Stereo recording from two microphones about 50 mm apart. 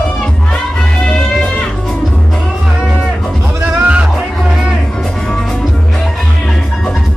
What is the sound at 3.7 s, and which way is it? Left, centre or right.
Music, right.